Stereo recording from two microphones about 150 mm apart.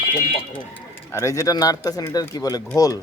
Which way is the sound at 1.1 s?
20° left (ahead or behind).